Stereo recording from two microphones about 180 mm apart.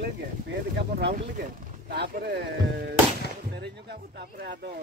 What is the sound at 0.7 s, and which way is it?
Speech, 65° right (ahead or behind).